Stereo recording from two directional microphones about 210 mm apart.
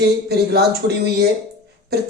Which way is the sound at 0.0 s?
50° right (ahead or behind).